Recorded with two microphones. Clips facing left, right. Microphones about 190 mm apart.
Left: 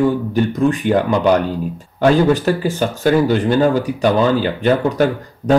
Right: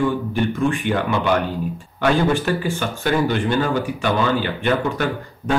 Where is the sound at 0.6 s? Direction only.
40° left (ahead or behind).